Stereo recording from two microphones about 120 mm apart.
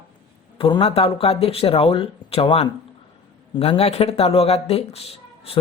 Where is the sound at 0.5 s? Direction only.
45° left (ahead or behind).